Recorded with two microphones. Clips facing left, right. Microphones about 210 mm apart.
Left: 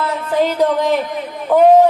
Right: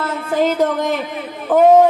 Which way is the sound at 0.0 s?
45° right (ahead or behind).